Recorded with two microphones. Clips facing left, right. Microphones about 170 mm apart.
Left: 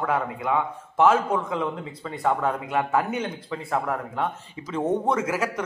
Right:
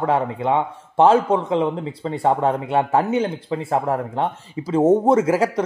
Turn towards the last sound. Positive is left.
turn(degrees=-35)  # may be behind; listen again after turning